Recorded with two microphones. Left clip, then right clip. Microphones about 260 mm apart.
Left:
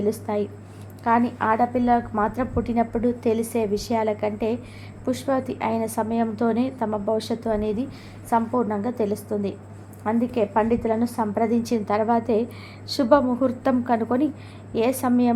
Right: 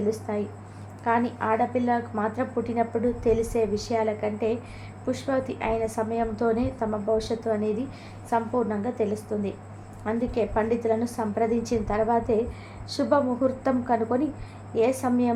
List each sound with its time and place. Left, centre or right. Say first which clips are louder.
0.0 s a woman's voice: left 3 dB; left